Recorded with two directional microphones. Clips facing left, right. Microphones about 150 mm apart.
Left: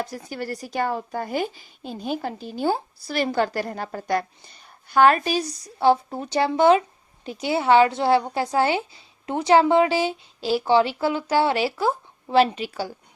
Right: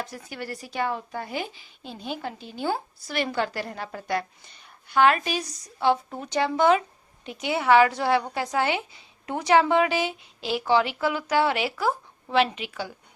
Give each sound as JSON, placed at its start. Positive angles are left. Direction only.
{"t": 0.0, "sound": "a woman's voice", "side_deg": 35}